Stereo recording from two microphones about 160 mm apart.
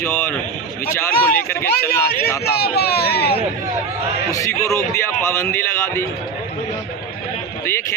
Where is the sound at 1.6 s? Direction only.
75° left (ahead or behind).